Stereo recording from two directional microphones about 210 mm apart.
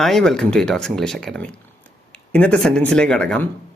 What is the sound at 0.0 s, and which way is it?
Speech, centre (ahead or behind).